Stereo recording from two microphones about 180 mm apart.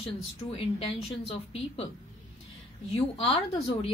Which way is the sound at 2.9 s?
35° left (ahead or behind).